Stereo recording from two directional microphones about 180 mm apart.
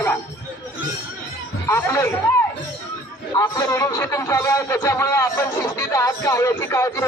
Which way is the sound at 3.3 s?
20° left (ahead or behind).